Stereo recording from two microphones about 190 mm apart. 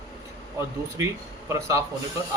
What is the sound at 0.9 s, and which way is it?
Speech, 15° right (ahead or behind).